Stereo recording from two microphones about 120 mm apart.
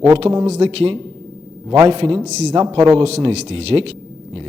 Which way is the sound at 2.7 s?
55° right (ahead or behind).